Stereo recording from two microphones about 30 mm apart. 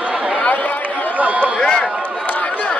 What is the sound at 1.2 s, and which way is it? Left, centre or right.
Run, right.